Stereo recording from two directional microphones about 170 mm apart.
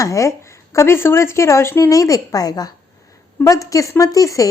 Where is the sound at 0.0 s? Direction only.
20° left (ahead or behind).